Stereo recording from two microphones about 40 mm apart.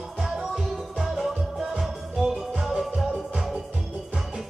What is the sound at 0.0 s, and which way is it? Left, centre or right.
Music, centre.